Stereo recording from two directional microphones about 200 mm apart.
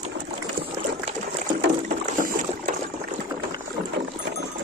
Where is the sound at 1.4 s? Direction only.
40° right (ahead or behind).